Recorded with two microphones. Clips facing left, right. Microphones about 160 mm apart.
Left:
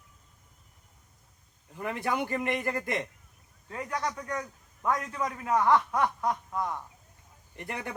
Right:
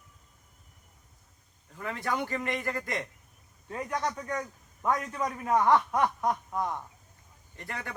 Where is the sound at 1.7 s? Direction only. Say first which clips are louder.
Left 2 dB; 20° left (ahead or behind).